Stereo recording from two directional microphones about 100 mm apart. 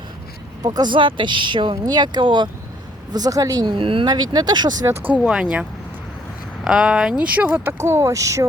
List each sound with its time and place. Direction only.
0.6 s speech: 45° right (ahead or behind)
3.8 s speech: 60° right (ahead or behind)
4.9 s speech: 15° right (ahead or behind)
6.7 s speech: 5° right (ahead or behind)
7.9 s speech: 30° right (ahead or behind)